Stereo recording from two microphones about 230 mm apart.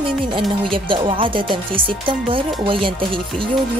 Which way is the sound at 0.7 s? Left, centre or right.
Right.